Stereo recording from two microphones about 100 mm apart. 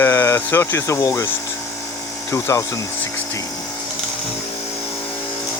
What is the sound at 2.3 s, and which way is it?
Speech, 30° left (ahead or behind).